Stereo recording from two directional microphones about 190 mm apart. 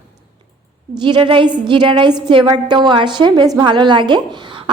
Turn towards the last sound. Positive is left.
turn(degrees=-25)  # may be behind; listen again after turning